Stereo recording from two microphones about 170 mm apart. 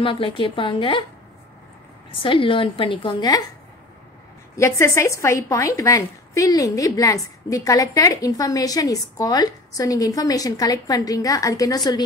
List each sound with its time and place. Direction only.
0.0 s a woman's voice: 30° left (ahead or behind)
2.1 s a woman's voice: 30° left (ahead or behind)
4.6 s a woman's voice: 15° left (ahead or behind)